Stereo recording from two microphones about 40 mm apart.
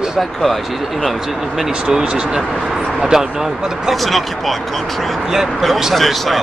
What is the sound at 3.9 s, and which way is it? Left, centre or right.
Speech, centre.